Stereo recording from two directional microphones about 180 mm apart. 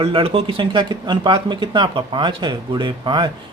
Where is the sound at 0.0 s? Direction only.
30° right (ahead or behind).